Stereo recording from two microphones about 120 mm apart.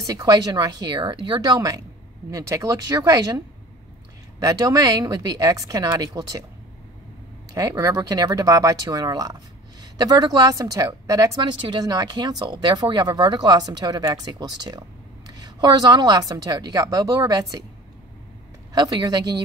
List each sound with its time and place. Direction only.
0.0 s a woman's voice: 35° right (ahead or behind)
7.5 s a woman's voice: 30° right (ahead or behind)
18.7 s a woman's voice: 35° right (ahead or behind)